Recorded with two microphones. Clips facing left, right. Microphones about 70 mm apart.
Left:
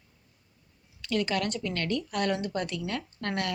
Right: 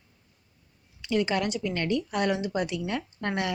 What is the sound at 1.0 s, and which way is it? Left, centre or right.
A woman's voice, right.